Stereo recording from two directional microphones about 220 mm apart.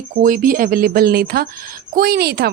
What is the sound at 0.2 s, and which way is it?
A woman's voice, 40° right (ahead or behind).